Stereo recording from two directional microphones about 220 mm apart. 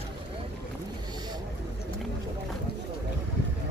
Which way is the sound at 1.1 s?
20° right (ahead or behind).